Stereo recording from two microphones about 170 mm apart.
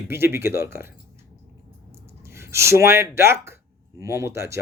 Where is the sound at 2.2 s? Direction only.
15° right (ahead or behind).